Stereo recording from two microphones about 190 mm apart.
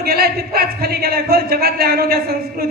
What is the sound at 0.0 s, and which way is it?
A man's voice, 55° right (ahead or behind).